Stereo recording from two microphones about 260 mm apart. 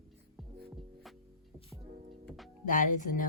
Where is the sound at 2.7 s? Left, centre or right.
Left.